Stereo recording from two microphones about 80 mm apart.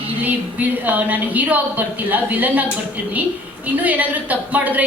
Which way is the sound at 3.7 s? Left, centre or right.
Centre.